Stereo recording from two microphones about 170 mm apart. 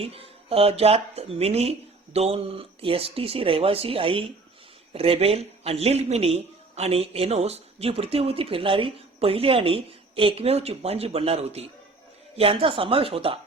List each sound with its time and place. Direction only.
0.0 s speech: 35° right (ahead or behind)